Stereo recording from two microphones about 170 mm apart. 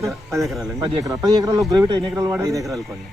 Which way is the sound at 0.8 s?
20° right (ahead or behind).